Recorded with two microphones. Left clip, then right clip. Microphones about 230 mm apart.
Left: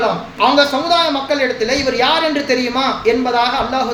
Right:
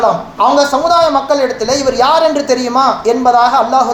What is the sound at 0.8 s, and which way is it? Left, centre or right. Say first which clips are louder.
Speech: right 5 dB; right.